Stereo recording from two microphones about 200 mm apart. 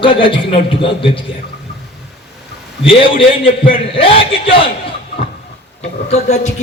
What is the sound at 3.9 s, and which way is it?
Speech, 25° left (ahead or behind).